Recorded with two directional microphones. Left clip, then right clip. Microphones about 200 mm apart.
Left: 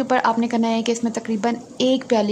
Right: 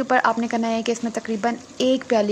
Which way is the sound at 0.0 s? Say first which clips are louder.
Even; 15° right (ahead or behind).